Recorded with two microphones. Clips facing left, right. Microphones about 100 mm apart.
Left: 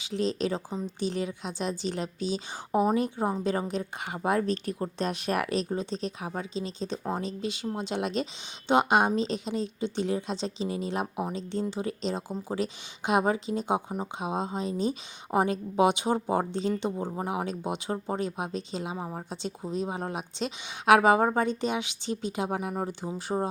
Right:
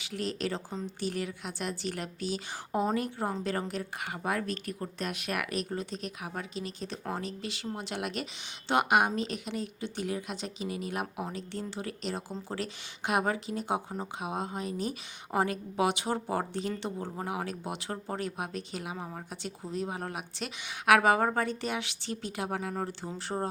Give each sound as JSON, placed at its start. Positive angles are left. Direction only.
{"t": 0.0, "sound": "a woman's voice", "side_deg": 20}